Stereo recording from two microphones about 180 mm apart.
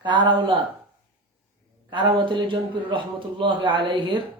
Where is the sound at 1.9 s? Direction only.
25° right (ahead or behind).